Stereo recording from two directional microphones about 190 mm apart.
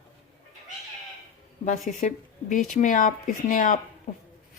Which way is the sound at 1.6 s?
40° left (ahead or behind).